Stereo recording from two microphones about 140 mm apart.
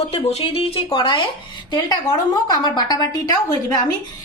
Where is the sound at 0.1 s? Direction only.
45° left (ahead or behind); by 3.3 s 30° left (ahead or behind).